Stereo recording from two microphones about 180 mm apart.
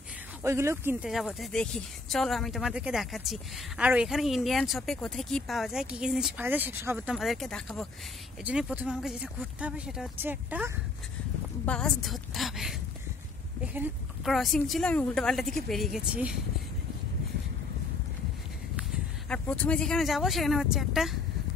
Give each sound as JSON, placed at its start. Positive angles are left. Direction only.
{"t": 0.4, "sound": "speech", "side_deg": -15}
{"t": 1.0, "sound": "speech", "side_deg": 0}
{"t": 7.2, "sound": "speech", "side_deg": 0}
{"t": 11.6, "sound": "speech", "side_deg": 5}
{"t": 13.7, "sound": "speech", "side_deg": 0}
{"t": 18.8, "sound": "speech", "side_deg": 5}